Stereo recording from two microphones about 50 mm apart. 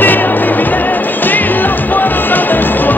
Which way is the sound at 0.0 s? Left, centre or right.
Left.